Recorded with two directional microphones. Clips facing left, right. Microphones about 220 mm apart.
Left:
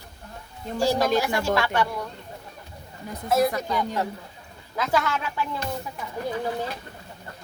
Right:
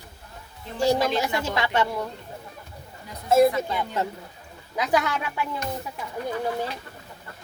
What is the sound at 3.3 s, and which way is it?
Speech, 25° right (ahead or behind).